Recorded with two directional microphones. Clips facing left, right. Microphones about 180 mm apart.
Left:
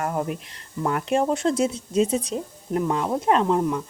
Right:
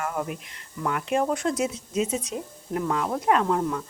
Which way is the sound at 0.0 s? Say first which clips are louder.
Left 3 dB; 40° left (ahead or behind).